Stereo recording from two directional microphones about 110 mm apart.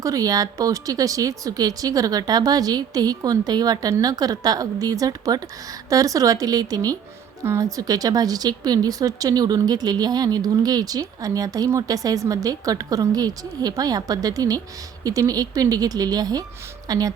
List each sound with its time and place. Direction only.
0.0 s a woman's voice: 30° right (ahead or behind)